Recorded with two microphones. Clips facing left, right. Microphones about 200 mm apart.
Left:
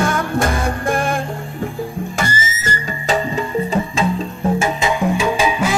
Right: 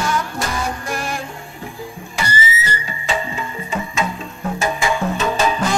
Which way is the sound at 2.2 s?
45° left (ahead or behind).